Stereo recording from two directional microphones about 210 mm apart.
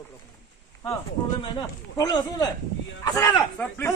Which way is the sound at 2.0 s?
20° left (ahead or behind).